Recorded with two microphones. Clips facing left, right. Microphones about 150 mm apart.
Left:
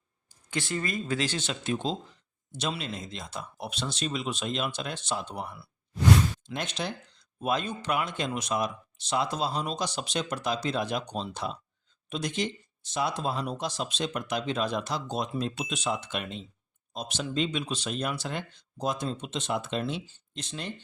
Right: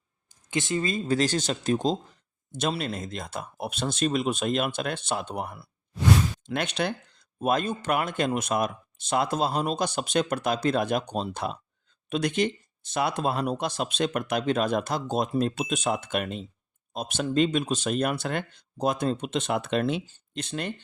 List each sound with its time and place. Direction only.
0.5 s speech: 20° right (ahead or behind); by 5.6 s 50° right (ahead or behind)
6.5 s speech: 65° right (ahead or behind)